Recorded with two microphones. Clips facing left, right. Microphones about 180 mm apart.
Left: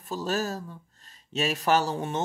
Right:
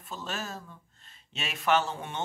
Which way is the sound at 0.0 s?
40° left (ahead or behind).